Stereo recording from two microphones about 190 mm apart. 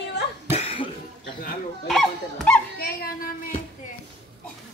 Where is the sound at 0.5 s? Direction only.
30° left (ahead or behind).